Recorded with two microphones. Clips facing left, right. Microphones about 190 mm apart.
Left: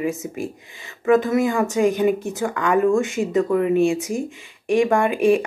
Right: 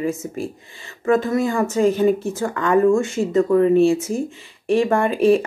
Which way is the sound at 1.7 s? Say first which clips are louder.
Right 4 dB; 15° left (ahead or behind).